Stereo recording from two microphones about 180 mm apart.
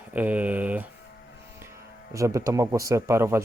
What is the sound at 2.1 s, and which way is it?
Speech, 15° right (ahead or behind).